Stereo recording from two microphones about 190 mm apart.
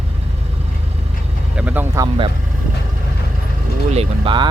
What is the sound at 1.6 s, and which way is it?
Speech, 10° right (ahead or behind).